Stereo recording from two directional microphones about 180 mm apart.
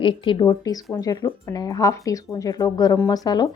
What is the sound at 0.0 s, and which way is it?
A woman's voice, 25° left (ahead or behind).